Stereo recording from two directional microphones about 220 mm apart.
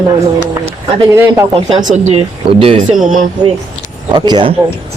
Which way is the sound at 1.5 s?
25° right (ahead or behind).